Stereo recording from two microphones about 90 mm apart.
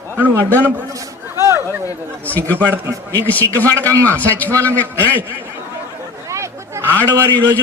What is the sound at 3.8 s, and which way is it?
Speech, 35° right (ahead or behind).